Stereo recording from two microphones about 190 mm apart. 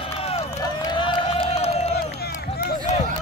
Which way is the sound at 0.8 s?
25° left (ahead or behind).